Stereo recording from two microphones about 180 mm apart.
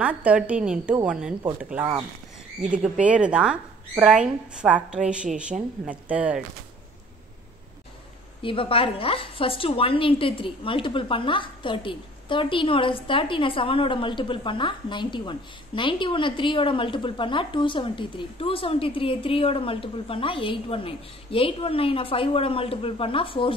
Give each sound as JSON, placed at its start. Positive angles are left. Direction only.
{"t": 0.0, "sound": "speech", "side_deg": -5}
{"t": 8.4, "sound": "a woman's voice", "side_deg": 30}